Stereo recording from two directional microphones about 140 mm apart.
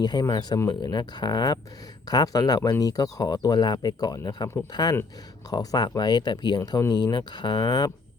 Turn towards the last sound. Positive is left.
turn(degrees=30)  # may be behind; listen again after turning